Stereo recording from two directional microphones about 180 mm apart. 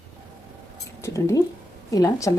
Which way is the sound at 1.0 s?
15° left (ahead or behind).